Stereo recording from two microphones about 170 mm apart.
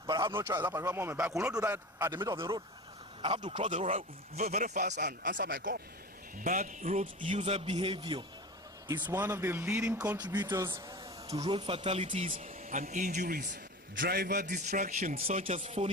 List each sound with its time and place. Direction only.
0.1 s speech: 25° right (ahead or behind)
3.2 s speech: 30° right (ahead or behind); by 5.8 s 60° right (ahead or behind)
6.4 s speech: 50° right (ahead or behind); by 8.2 s 30° right (ahead or behind)
9.0 s speech: 15° right (ahead or behind)
11.3 s speech: 35° right (ahead or behind)